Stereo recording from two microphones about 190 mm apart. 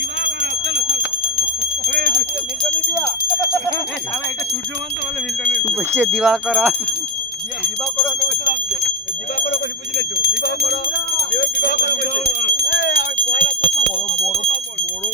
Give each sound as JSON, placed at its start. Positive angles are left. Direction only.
{"t": 0.9, "sound": "a sound", "side_deg": -40}
{"t": 5.9, "sound": "speech", "side_deg": -10}
{"t": 10.2, "sound": "alarm", "side_deg": 50}
{"t": 11.3, "sound": "alarm", "side_deg": 60}
{"t": 12.6, "sound": "jingle bell", "side_deg": 50}